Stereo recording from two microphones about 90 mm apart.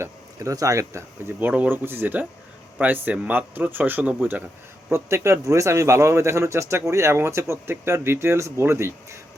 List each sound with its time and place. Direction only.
0.0 s speech: 35° right (ahead or behind)
1.4 s speech: 20° right (ahead or behind)
4.9 s a man's voice: 30° right (ahead or behind)